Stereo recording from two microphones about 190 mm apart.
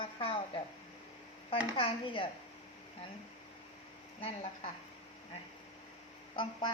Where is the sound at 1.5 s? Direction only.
30° left (ahead or behind).